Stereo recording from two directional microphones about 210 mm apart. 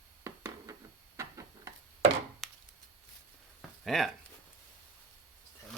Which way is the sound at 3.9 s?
Centre (ahead or behind).